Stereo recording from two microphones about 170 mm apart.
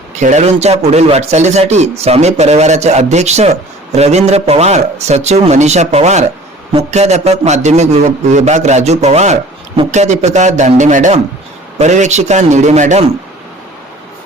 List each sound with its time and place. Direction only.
0.2 s a man's voice: 45° right (ahead or behind)